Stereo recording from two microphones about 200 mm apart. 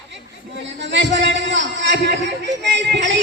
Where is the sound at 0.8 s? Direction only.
60° right (ahead or behind).